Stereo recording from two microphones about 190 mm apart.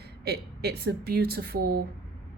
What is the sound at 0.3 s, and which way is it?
A woman's voice, 55° right (ahead or behind).